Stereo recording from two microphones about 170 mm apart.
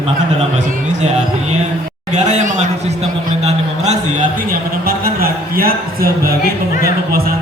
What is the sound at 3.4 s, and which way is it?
Music, 40° right (ahead or behind).